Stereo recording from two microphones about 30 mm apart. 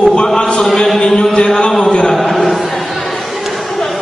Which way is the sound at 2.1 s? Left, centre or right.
Centre.